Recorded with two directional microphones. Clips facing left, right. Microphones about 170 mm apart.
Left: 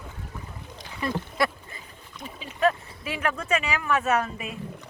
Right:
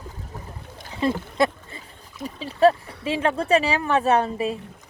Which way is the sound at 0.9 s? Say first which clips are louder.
Right 5 dB; 25° right (ahead or behind).